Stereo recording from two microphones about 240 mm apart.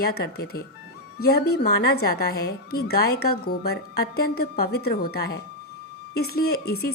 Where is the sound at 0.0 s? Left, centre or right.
Left.